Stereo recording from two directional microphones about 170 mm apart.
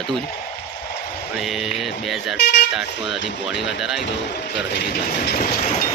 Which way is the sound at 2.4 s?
75° left (ahead or behind).